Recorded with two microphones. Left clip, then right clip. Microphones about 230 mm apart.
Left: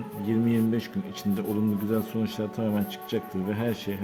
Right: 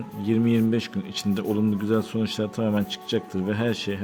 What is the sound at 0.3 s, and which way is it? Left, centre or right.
A man's voice, right.